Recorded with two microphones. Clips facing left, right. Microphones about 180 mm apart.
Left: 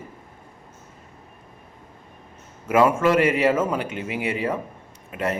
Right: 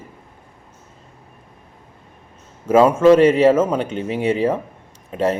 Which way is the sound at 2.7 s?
25° right (ahead or behind).